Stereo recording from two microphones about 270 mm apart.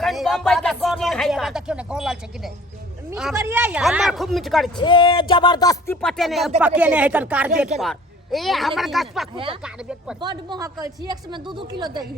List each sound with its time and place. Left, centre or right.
0.0 s speech: centre
4.8 s a sound: centre
6.6 s speech: centre
9.3 s speech: centre
9.6 s speech: centre
10.2 s a woman's voice: centre